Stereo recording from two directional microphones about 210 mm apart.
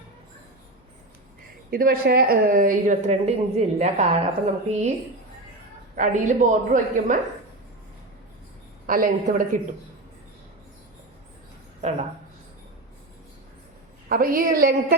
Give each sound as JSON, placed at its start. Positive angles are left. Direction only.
{"t": 1.7, "sound": "a woman's voice", "side_deg": -45}
{"t": 6.0, "sound": "a woman's voice", "side_deg": -35}
{"t": 8.9, "sound": "a woman's voice", "side_deg": -40}
{"t": 11.8, "sound": "speech", "side_deg": -30}
{"t": 14.1, "sound": "speech", "side_deg": -45}